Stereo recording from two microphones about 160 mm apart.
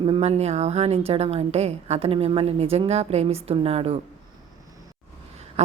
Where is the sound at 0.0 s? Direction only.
35° right (ahead or behind).